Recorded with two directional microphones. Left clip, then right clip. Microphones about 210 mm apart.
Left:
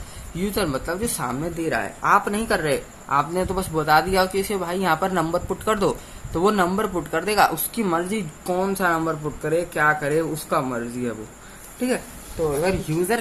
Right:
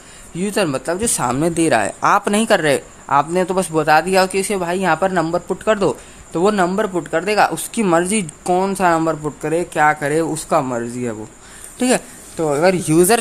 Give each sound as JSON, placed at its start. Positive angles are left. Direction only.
{"t": 0.3, "sound": "speech", "side_deg": -30}
{"t": 12.6, "sound": "speech", "side_deg": -55}